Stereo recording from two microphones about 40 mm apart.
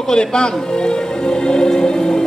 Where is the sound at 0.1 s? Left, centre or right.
Centre.